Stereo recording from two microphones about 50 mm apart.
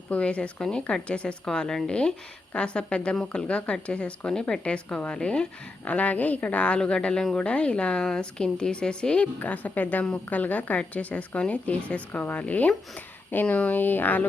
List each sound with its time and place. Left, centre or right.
0.1 s a woman's voice: left
1.5 s a woman's voice: centre
4.3 s a woman's voice: centre
5.8 s a woman's voice: left
9.4 s a woman's voice: left